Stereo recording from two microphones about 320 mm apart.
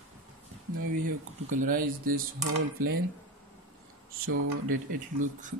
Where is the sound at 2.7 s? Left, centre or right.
Right.